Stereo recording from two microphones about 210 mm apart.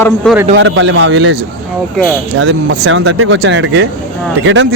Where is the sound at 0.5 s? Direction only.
60° right (ahead or behind).